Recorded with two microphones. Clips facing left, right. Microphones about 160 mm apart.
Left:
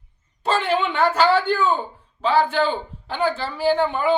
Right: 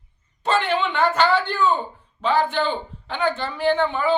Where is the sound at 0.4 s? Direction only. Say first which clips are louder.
Even; 5° left (ahead or behind).